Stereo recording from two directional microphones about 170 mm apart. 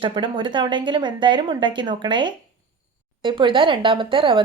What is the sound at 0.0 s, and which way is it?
Speech, 30° right (ahead or behind).